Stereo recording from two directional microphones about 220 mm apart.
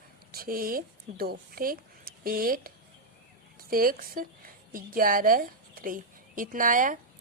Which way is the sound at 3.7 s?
40° right (ahead or behind).